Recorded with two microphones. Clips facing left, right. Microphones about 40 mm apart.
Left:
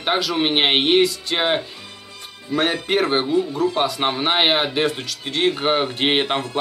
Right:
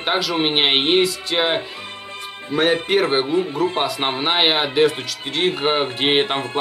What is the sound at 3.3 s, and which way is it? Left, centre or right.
Speech, right.